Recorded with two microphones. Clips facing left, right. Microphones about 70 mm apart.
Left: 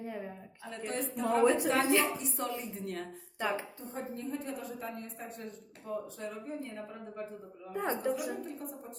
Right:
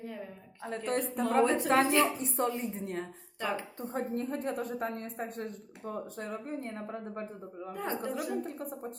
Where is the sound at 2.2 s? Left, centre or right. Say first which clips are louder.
Right 5 dB; right.